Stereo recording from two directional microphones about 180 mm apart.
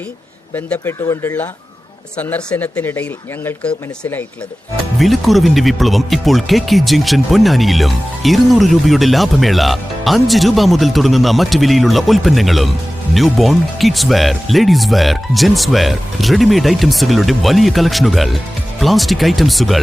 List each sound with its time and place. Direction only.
0.5 s speech: 10° left (ahead or behind)